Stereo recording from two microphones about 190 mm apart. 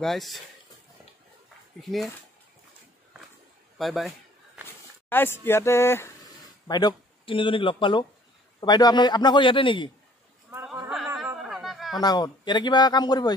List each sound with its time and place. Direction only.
0.0 s speech: centre (ahead or behind)
1.8 s speech: centre (ahead or behind)
3.7 s a man's voice: centre (ahead or behind)
4.6 s a man's voice: 10° left (ahead or behind); by 9.8 s 25° left (ahead or behind)
10.5 s a sound: 5° right (ahead or behind)
12.0 s a man's voice: 20° left (ahead or behind)